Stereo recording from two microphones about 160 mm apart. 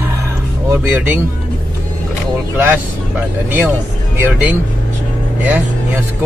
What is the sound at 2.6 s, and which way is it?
Speech, 10° right (ahead or behind).